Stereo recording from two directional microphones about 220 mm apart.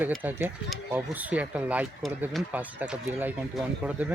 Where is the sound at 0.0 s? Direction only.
10° right (ahead or behind).